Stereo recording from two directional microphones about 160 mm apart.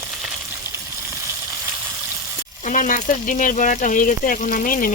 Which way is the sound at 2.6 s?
50° left (ahead or behind).